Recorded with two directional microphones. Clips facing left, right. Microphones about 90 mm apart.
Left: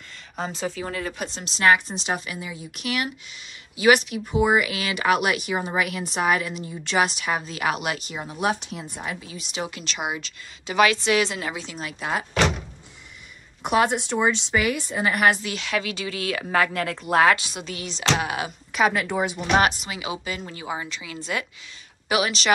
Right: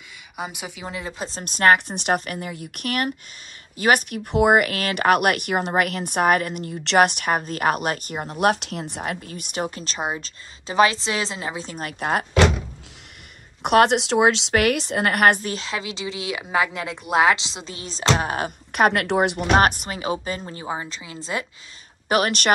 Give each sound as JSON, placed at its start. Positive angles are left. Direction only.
{"t": 0.4, "sound": "speech", "side_deg": -15}
{"t": 1.1, "sound": "a woman's voice", "side_deg": -30}
{"t": 1.4, "sound": "speech", "side_deg": -50}
{"t": 4.3, "sound": "a woman's voice", "side_deg": -60}
{"t": 11.6, "sound": "speech", "side_deg": -50}
{"t": 13.7, "sound": "a woman's voice", "side_deg": -70}
{"t": 15.4, "sound": "speech", "side_deg": -35}
{"t": 18.7, "sound": "speech", "side_deg": -55}
{"t": 22.1, "sound": "speech", "side_deg": -50}